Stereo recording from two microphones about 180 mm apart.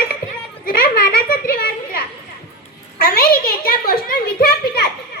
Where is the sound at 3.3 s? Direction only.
55° left (ahead or behind).